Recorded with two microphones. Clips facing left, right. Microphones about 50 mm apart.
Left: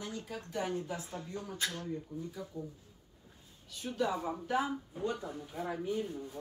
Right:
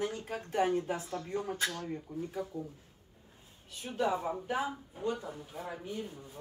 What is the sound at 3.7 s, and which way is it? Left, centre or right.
Speech, right.